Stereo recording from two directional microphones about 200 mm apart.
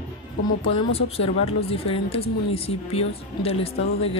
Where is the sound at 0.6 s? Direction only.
25° left (ahead or behind).